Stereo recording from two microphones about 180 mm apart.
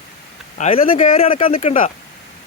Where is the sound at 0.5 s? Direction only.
35° left (ahead or behind).